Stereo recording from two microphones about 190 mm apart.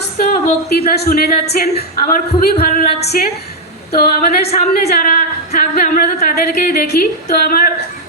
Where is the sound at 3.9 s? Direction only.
55° left (ahead or behind).